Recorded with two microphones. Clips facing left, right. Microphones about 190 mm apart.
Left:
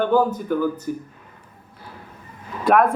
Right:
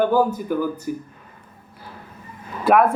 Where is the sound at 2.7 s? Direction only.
5° right (ahead or behind).